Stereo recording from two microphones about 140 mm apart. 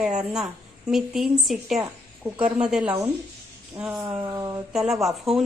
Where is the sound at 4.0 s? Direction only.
30° right (ahead or behind).